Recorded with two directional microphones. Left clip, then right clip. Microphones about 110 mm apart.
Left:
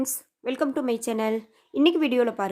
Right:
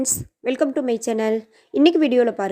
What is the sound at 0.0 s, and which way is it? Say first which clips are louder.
Speech: right 6 dB; 30° right (ahead or behind).